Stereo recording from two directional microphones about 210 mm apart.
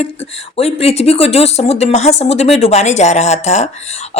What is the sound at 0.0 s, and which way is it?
Speech, 30° left (ahead or behind).